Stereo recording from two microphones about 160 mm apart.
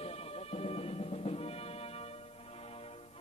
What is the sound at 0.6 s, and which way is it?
Music, 40° left (ahead or behind).